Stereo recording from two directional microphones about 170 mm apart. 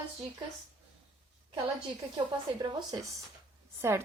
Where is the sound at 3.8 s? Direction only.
15° right (ahead or behind).